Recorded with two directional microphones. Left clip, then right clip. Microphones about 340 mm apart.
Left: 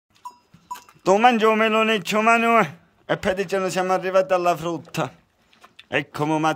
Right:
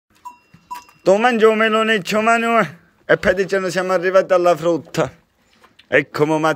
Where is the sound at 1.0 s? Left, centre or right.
Centre.